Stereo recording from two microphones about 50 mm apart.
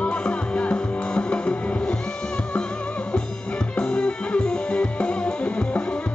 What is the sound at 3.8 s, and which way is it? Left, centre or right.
Music, centre.